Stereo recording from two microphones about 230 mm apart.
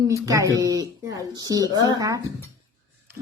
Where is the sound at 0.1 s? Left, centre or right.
Centre.